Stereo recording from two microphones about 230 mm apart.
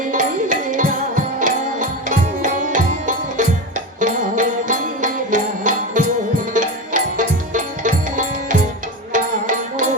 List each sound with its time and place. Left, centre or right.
0.0 s music: right